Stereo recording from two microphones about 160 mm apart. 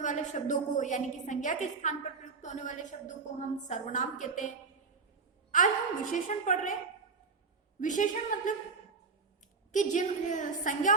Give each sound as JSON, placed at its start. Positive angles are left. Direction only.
{"t": 0.0, "sound": "a woman's voice", "side_deg": 50}
{"t": 7.8, "sound": "a woman's voice", "side_deg": 55}
{"t": 9.7, "sound": "a woman's voice", "side_deg": 50}